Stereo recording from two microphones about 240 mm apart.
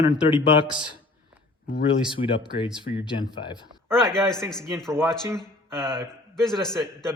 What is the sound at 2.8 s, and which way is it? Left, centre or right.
Speech, centre.